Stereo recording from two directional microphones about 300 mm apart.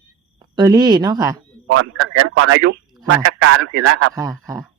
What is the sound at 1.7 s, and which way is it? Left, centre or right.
Speech, right.